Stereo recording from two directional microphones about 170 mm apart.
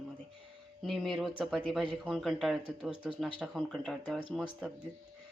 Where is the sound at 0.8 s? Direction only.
Centre (ahead or behind).